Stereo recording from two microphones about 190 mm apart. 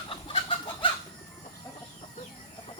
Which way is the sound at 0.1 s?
25° left (ahead or behind).